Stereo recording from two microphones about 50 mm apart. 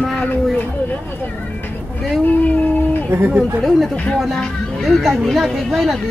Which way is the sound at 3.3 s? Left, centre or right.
Centre.